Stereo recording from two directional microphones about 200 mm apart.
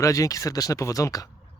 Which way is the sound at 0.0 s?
15° left (ahead or behind).